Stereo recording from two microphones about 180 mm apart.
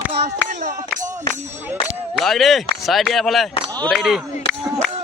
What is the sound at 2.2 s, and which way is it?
Speech, centre (ahead or behind).